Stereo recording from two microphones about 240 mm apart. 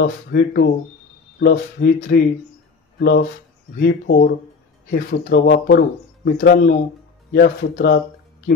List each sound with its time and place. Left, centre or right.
0.0 s speech: left